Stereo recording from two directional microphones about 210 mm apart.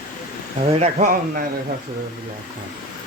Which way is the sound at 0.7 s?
35° right (ahead or behind).